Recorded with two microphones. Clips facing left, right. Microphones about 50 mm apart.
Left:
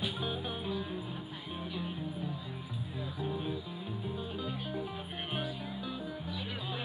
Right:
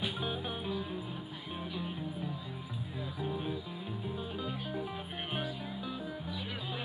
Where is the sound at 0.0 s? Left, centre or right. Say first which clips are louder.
Even; right.